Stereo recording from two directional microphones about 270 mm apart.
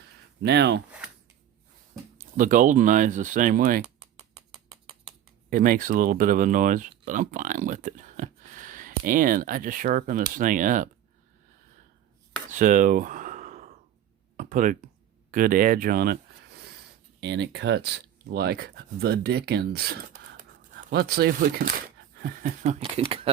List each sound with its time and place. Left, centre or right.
0.4 s speech: right
2.1 s speech: right
5.5 s speech: right
12.5 s a sound: right
15.3 s speech: right